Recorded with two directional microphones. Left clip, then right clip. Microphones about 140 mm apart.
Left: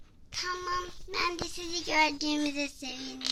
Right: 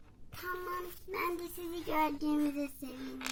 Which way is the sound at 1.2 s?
10° left (ahead or behind).